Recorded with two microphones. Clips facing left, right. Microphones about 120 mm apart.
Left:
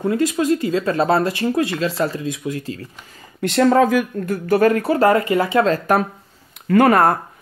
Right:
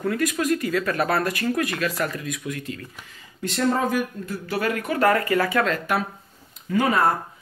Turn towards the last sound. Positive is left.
turn(degrees=55)  # may be behind; listen again after turning